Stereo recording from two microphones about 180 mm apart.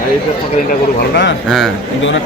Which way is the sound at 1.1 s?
90° left.